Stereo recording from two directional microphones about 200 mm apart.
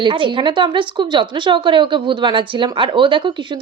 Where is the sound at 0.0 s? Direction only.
25° right (ahead or behind).